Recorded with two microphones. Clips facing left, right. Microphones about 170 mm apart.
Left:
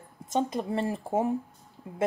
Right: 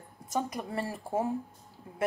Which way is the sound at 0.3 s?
25° left (ahead or behind).